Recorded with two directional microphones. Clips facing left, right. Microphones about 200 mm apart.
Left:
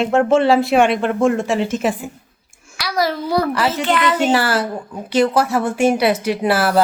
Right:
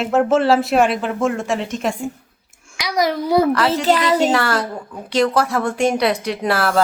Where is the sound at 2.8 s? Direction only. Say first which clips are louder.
Right 1 dB; 15° right (ahead or behind).